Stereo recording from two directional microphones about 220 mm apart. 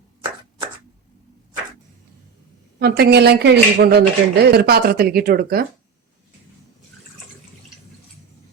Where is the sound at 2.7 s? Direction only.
50° right (ahead or behind).